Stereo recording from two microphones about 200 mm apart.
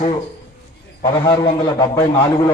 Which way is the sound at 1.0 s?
20° left (ahead or behind).